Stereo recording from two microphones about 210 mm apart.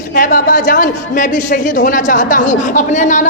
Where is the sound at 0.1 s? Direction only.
40° left (ahead or behind).